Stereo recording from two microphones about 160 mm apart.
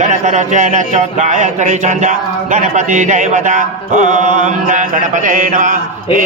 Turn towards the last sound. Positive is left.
turn(degrees=-50)  # may be behind; listen again after turning